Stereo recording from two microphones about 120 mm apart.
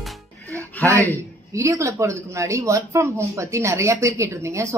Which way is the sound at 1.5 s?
25° right (ahead or behind).